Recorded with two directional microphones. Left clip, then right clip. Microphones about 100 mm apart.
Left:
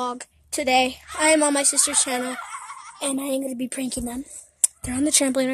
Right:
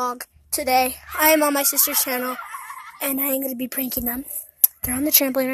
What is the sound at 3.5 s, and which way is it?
Speech, 20° left (ahead or behind).